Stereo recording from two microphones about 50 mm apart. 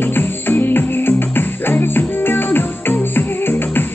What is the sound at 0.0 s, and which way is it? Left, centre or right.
Music, left.